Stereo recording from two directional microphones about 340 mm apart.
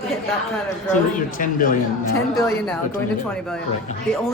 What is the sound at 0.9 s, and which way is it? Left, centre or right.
Speech, left.